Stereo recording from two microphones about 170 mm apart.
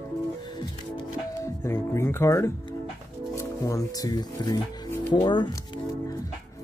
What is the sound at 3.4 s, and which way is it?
Speech, 20° left (ahead or behind).